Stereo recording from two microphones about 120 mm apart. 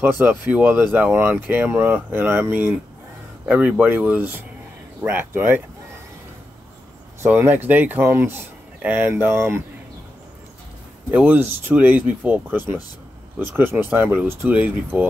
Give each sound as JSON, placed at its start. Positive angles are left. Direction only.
{"t": 0.0, "sound": "a man's voice", "side_deg": -15}
{"t": 7.2, "sound": "a man's voice", "side_deg": -15}
{"t": 11.1, "sound": "a man's voice", "side_deg": -15}